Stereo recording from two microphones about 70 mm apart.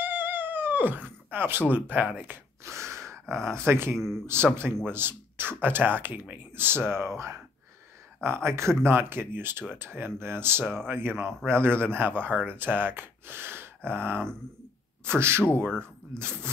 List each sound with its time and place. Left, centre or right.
0.0 s a sound: right
2.8 s gasp: right
3.5 s speech: right
8.5 s speech: right